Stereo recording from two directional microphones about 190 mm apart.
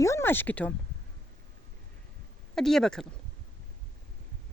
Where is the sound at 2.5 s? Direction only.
Centre (ahead or behind).